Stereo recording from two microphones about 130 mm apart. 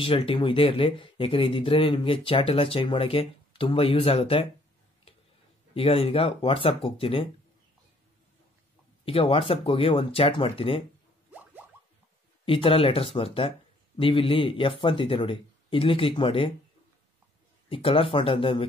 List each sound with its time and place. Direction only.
0.0 s speech: 45° left (ahead or behind)
5.8 s speech: 45° left (ahead or behind)
9.0 s speech: 45° left (ahead or behind)
12.4 s speech: 45° left (ahead or behind)
17.6 s speech: 45° left (ahead or behind)